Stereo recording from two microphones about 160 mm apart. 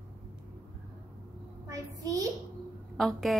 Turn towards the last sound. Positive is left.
turn(degrees=0)  # may be behind; listen again after turning